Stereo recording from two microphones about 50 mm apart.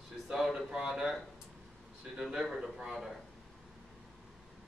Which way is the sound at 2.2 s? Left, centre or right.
Centre.